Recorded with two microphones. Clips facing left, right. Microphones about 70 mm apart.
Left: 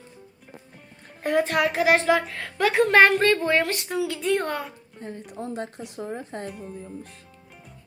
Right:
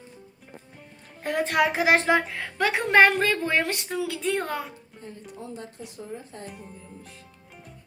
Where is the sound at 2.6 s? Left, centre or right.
Centre.